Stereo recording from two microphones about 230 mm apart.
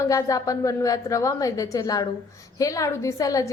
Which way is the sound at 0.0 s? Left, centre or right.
Centre.